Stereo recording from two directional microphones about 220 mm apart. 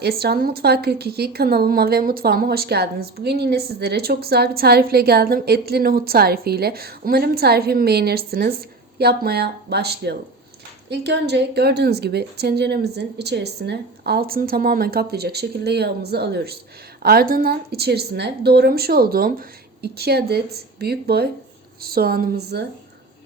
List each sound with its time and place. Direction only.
0.0 s a woman's voice: 45° right (ahead or behind)